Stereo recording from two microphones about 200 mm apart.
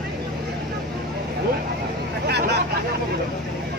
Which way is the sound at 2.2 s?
55° right (ahead or behind).